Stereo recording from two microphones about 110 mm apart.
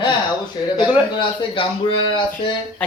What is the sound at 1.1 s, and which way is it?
Speech, 50° left (ahead or behind).